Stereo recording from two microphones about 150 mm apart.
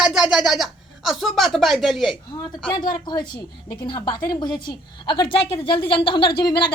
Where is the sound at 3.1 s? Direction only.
30° left (ahead or behind).